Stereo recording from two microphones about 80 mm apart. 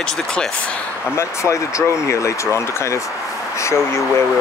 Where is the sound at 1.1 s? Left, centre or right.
Left.